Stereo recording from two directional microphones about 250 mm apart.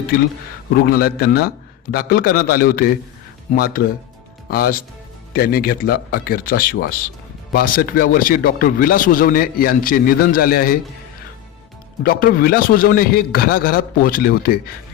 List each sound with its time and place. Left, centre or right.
0.9 s a man's voice: left
12.0 s a man's voice: left